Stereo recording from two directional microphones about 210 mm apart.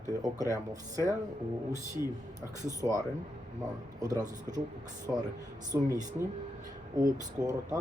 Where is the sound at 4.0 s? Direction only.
20° right (ahead or behind).